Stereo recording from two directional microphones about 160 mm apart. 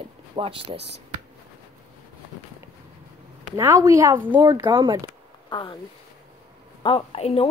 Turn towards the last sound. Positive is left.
turn(degrees=40)  # may be behind; listen again after turning